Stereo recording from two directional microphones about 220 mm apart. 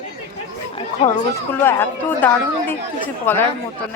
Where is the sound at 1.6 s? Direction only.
10° left (ahead or behind).